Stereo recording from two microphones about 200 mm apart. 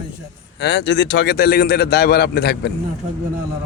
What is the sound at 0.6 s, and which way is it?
A man's voice, 60° left (ahead or behind).